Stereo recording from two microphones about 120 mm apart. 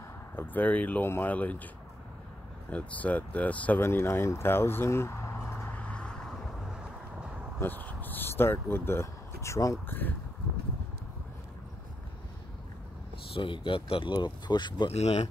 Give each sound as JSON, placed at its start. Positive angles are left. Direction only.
{"t": 0.4, "sound": "speech", "side_deg": 15}
{"t": 2.7, "sound": "speech", "side_deg": 10}
{"t": 7.6, "sound": "speech", "side_deg": 15}
{"t": 13.3, "sound": "speech", "side_deg": 45}
{"t": 14.9, "sound": "speech", "side_deg": 65}